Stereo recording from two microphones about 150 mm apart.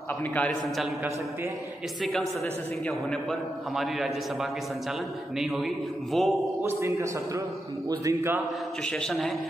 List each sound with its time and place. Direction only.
0.3 s a man's voice: 5° left (ahead or behind)
2.9 s a man's voice: centre (ahead or behind)
6.1 s a man's voice: centre (ahead or behind)
6.6 s a man's voice: 20° right (ahead or behind)
8.9 s a man's voice: 5° left (ahead or behind)